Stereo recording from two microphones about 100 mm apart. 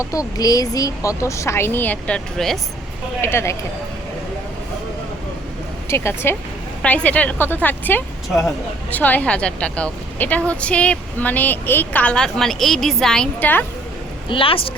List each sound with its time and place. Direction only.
0.0 s speech: 35° left (ahead or behind); by 2.6 s 5° left (ahead or behind)
3.2 s speech: 25° left (ahead or behind)
5.9 s speech: 25° left (ahead or behind)
6.8 s a woman's voice: 15° left (ahead or behind)
13.4 s a woman's voice: 15° left (ahead or behind)
14.3 s speech: 60° left (ahead or behind)